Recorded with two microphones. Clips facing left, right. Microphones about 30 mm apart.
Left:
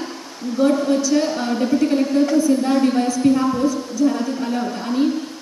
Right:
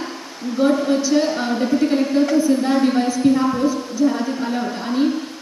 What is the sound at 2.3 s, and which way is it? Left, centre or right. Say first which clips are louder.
A woman's voice: even; centre.